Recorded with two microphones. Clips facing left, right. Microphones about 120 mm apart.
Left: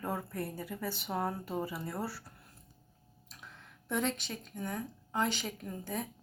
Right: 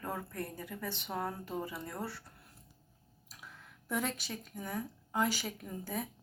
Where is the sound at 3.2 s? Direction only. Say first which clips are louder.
Even; 5° right (ahead or behind).